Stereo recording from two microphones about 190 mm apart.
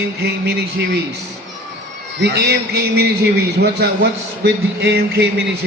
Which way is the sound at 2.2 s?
60° right (ahead or behind).